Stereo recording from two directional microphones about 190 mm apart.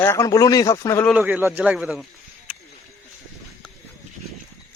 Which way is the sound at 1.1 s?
5° right (ahead or behind).